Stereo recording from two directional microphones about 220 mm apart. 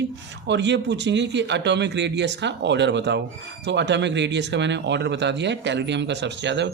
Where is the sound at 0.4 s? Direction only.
55° right (ahead or behind).